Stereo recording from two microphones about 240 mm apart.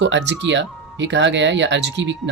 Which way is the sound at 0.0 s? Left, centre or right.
Right.